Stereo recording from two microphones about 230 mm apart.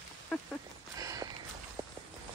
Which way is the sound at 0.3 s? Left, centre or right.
Centre.